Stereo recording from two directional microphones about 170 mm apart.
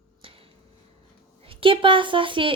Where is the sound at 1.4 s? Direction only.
30° right (ahead or behind).